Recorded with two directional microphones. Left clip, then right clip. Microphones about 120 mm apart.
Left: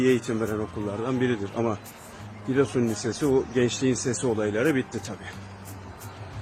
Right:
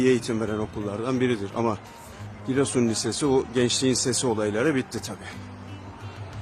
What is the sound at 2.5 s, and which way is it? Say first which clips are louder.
Speech: even; 40° right (ahead or behind).